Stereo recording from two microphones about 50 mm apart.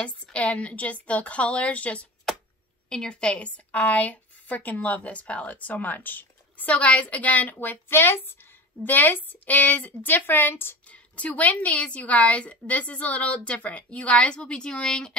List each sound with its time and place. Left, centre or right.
0.0 s speech: left
8.8 s a woman's voice: left
10.9 s speech: left